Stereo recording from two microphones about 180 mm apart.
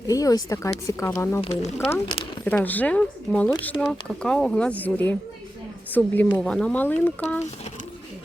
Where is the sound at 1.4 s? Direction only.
35° left (ahead or behind).